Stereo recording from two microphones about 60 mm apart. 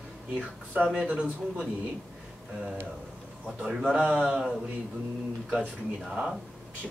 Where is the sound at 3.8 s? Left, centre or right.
Centre.